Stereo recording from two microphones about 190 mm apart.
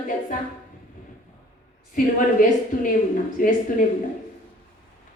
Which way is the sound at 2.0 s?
45° left (ahead or behind).